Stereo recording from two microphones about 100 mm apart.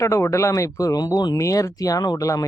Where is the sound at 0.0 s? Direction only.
30° left (ahead or behind).